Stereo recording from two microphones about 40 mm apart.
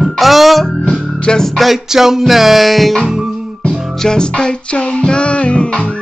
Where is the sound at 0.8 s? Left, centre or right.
Left.